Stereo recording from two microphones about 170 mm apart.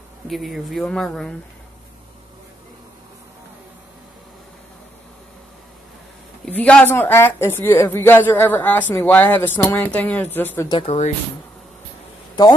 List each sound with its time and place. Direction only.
0.3 s speech: centre (ahead or behind)
6.4 s speech: 5° left (ahead or behind)
10.8 s speech: 35° left (ahead or behind)